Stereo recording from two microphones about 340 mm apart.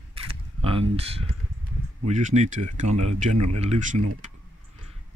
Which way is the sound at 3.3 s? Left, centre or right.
Right.